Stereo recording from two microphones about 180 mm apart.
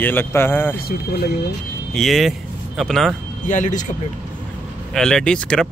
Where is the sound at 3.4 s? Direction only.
45° left (ahead or behind).